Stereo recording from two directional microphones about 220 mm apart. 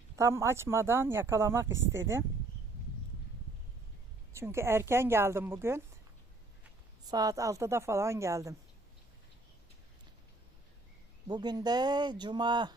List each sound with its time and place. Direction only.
0.2 s speech: 10° right (ahead or behind)
4.3 s speech: 10° right (ahead or behind)
7.1 s speech: 15° right (ahead or behind)
11.3 s speech: 20° right (ahead or behind)